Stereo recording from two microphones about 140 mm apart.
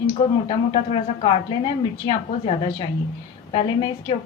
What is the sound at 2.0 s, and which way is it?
Speech, 30° left (ahead or behind).